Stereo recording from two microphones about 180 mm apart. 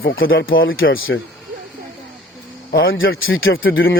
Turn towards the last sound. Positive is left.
turn(degrees=90)